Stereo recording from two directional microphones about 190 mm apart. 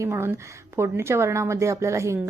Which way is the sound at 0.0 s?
15° right (ahead or behind).